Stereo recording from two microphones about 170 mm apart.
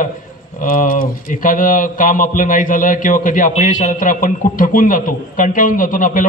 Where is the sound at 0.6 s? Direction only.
55° left (ahead or behind).